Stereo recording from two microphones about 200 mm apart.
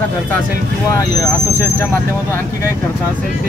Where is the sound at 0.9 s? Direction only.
15° left (ahead or behind).